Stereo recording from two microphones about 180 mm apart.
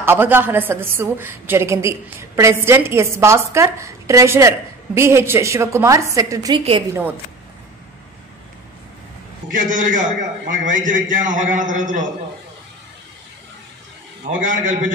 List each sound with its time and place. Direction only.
0.0 s a woman's voice: 10° right (ahead or behind)
9.5 s a man's voice: 45° right (ahead or behind)
14.4 s a man's voice: 45° right (ahead or behind)